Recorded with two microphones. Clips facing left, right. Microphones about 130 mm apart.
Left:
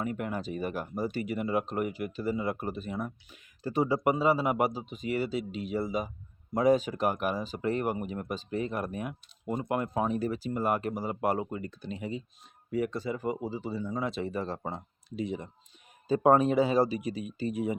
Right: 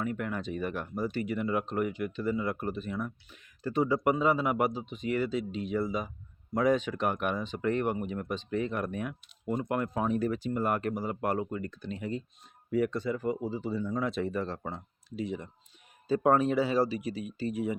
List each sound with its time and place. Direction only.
0.0 s speech: 10° left (ahead or behind)
6.6 s speech: 40° left (ahead or behind)
7.0 s speech: 5° left (ahead or behind)
7.6 s speech: 35° left (ahead or behind)
7.9 s speech: 5° left (ahead or behind)
8.5 s speech: 35° left (ahead or behind)
9.6 s speech: 10° left (ahead or behind)